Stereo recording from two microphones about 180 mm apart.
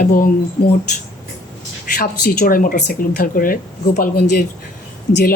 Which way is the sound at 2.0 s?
55° left (ahead or behind).